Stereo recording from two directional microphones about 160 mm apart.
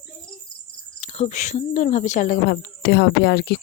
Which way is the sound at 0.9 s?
40° left (ahead or behind).